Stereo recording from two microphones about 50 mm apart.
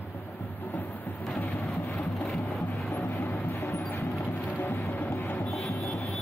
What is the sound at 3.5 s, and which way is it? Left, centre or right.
Music, left.